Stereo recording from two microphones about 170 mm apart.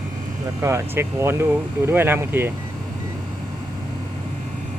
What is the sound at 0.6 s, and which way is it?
Speech, 15° right (ahead or behind).